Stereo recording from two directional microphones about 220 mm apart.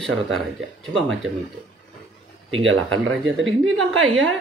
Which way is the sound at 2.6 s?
65° right (ahead or behind).